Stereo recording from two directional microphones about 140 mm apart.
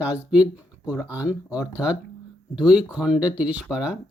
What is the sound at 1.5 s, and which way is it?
Speech, 10° right (ahead or behind).